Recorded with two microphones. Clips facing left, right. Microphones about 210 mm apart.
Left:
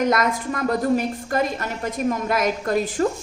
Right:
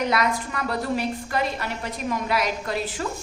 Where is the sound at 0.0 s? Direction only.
45° left (ahead or behind).